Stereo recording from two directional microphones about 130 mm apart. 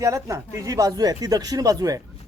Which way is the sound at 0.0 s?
25° right (ahead or behind).